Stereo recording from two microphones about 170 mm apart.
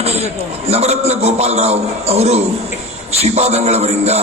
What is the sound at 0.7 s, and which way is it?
A man's voice, 40° right (ahead or behind).